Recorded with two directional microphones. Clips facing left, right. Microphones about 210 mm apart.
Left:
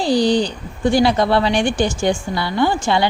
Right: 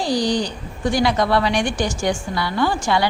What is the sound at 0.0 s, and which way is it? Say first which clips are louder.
Speech: left 4 dB; 30° left (ahead or behind).